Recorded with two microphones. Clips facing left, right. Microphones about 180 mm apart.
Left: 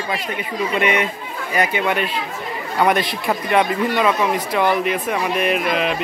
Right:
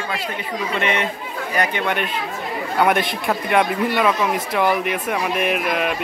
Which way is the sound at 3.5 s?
5° right (ahead or behind).